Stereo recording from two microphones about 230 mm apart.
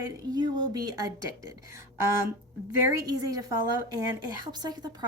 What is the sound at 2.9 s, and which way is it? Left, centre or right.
A woman's voice, centre.